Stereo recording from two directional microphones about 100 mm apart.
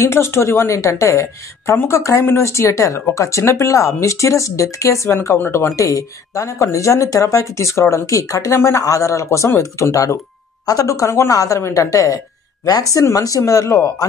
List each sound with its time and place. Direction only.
0.0 s speech: 25° left (ahead or behind)